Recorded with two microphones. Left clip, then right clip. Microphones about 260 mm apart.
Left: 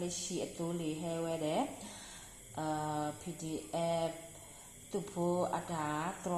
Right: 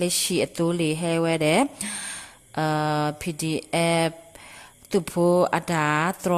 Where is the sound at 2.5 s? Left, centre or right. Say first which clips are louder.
Right 13 dB; right.